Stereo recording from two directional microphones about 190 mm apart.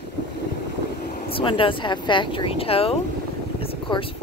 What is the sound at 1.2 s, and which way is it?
Speech, 30° left (ahead or behind).